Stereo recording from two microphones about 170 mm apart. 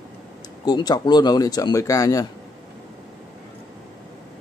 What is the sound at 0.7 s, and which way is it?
Speech, 25° left (ahead or behind).